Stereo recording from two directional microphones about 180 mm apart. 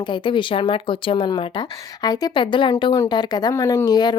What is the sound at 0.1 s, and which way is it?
Speech, 25° left (ahead or behind).